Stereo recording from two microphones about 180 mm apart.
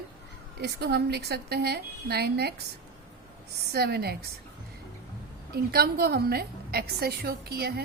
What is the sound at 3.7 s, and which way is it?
Speech, 60° right (ahead or behind).